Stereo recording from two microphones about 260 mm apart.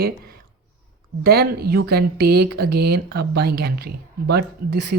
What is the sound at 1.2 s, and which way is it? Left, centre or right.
Speech, right.